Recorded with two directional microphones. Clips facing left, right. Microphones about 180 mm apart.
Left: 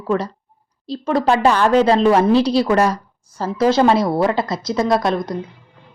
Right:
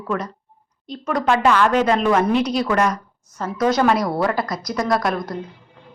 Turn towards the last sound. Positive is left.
turn(degrees=20)  # may be behind; listen again after turning